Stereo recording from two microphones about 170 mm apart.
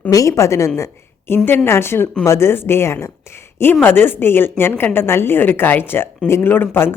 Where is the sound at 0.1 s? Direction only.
20° left (ahead or behind).